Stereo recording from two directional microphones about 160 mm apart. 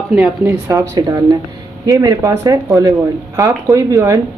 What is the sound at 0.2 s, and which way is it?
Speech, 15° right (ahead or behind).